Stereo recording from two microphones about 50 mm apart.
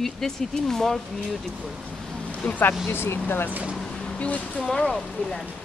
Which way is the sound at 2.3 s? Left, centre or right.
Left.